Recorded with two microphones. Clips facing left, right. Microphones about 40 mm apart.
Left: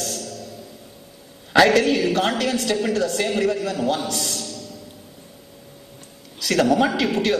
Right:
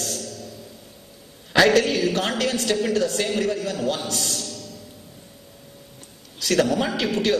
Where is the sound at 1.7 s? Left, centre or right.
Left.